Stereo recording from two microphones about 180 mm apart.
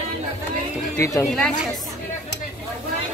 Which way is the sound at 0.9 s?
20° left (ahead or behind).